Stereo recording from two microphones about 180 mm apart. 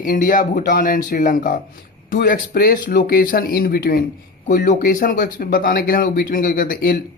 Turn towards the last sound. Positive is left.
turn(degrees=55)  # may be behind; listen again after turning